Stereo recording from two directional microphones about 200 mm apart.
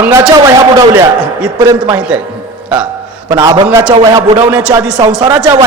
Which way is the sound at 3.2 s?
20° right (ahead or behind).